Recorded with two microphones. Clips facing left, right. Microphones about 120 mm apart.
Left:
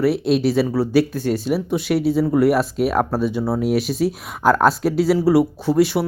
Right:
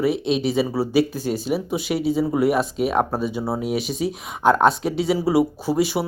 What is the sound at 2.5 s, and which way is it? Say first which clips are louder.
Speech: left 3 dB; centre (ahead or behind).